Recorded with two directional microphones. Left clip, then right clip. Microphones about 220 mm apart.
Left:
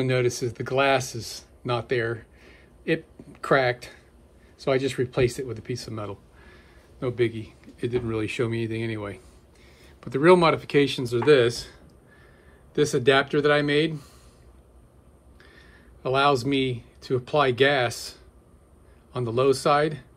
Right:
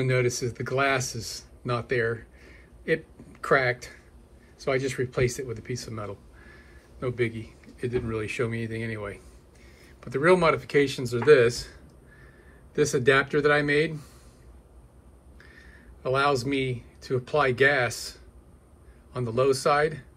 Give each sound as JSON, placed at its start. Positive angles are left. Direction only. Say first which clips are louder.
{"t": 0.2, "sound": "speech", "louder": "left 1 dB", "side_deg": 15}
{"t": 3.3, "sound": "speech", "louder": "left 1 dB", "side_deg": 20}
{"t": 15.4, "sound": "speech", "louder": "right 1 dB", "side_deg": 20}
{"t": 19.1, "sound": "speech", "louder": "left 2 dB", "side_deg": 20}